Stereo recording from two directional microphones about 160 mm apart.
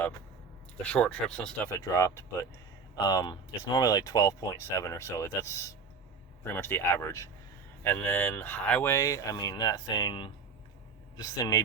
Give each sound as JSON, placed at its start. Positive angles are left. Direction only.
{"t": 0.8, "sound": "speech", "side_deg": 5}